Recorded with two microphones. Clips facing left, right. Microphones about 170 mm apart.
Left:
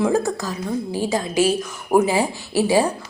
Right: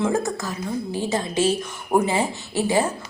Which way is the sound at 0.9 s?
10° left (ahead or behind).